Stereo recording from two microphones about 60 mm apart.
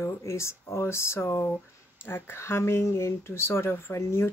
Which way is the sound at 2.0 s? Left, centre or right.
Left.